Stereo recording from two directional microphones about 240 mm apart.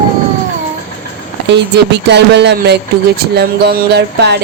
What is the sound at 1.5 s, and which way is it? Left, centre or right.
Music, right.